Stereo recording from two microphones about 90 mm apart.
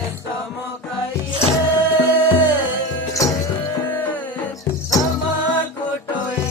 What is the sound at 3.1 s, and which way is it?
Music, 40° left (ahead or behind).